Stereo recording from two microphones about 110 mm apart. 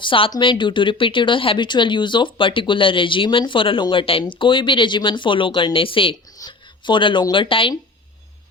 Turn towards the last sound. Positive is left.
turn(degrees=50)  # may be behind; listen again after turning